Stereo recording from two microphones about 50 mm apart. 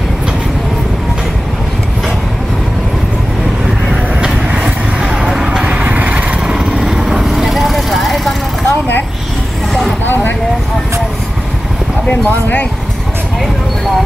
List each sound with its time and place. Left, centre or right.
3.9 s vehicle: right
5.0 s a sound: centre
5.9 s vehicle: right
6.4 s vehicle: centre
8.6 s a sound: left
10.0 s vehicle: left